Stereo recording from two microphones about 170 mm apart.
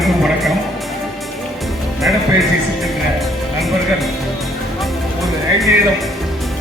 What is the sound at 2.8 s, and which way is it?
Music, centre (ahead or behind).